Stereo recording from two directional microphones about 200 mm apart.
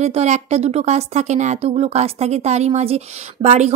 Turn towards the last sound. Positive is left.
turn(degrees=-35)  # may be behind; listen again after turning